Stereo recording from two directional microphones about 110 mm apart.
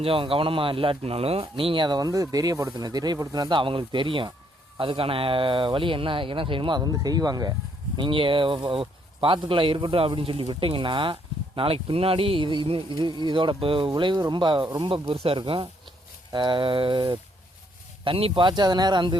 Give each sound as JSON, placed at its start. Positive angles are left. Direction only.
{"t": 0.0, "sound": "speech", "side_deg": -55}
{"t": 7.9, "sound": "speech", "side_deg": -50}
{"t": 13.9, "sound": "speech", "side_deg": -40}